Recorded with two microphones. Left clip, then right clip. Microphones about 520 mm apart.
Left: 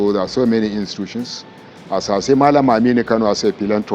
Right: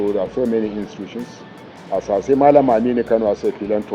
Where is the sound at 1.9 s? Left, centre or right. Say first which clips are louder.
Left 1 dB; left.